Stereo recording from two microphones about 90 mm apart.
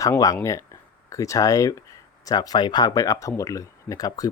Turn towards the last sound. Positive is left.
turn(degrees=40)  # may be behind; listen again after turning